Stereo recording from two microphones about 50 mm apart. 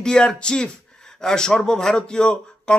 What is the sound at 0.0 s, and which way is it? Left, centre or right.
Speech, centre.